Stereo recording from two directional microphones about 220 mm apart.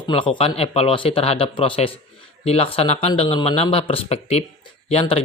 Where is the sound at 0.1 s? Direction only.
25° left (ahead or behind).